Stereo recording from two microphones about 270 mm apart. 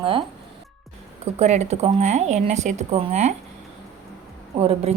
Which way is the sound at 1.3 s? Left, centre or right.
Right.